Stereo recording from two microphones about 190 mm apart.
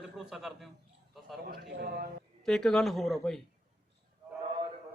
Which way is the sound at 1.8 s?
55° right (ahead or behind).